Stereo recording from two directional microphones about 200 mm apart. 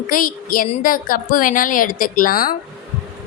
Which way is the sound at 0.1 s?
45° left (ahead or behind).